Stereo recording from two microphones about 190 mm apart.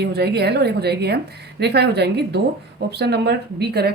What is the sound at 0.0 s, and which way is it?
A woman's voice, 60° right (ahead or behind).